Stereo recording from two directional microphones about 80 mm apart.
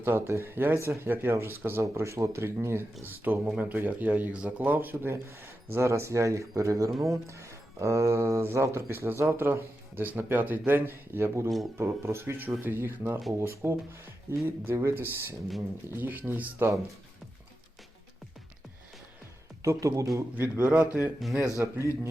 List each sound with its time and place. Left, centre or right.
0.0 s speech: right
6.9 s speech: centre
7.3 s speech: right
19.6 s speech: right
20.4 s speech: right
21.6 s speech: right